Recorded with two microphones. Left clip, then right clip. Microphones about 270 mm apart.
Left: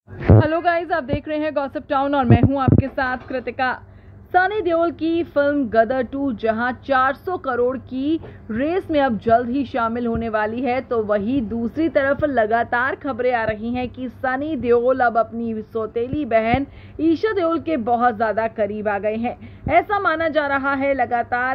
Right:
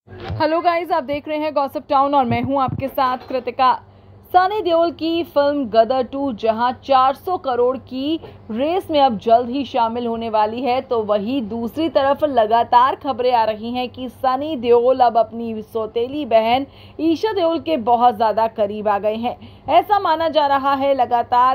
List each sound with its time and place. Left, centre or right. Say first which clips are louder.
0.4 s a woman's voice: right 5 dB; right